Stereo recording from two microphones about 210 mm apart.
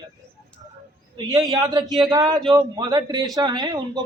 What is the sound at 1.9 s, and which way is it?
Speech, centre (ahead or behind).